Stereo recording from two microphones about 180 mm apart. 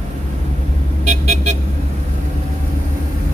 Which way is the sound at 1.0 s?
40° right (ahead or behind).